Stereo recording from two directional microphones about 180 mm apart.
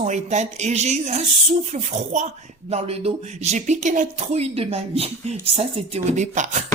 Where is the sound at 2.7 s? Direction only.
35° right (ahead or behind).